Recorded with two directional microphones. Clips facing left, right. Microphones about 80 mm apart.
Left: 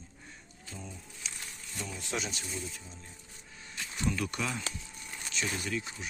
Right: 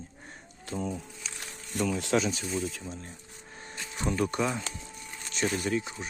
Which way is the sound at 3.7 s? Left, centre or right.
Right.